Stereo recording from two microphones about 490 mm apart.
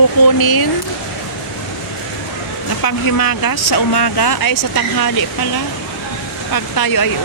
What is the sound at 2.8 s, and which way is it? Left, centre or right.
Speech, left.